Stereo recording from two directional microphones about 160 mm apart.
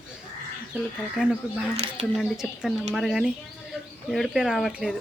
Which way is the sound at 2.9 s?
Centre (ahead or behind).